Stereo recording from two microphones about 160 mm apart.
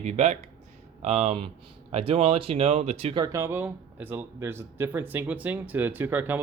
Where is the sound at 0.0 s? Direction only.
45° right (ahead or behind).